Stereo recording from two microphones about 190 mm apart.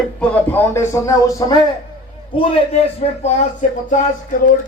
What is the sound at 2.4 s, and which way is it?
A man's voice, 30° left (ahead or behind).